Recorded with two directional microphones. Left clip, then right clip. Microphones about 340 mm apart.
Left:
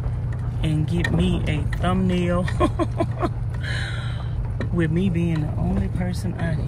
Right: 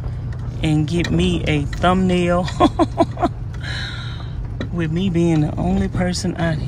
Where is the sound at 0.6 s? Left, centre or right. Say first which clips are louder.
Right 6 dB; centre.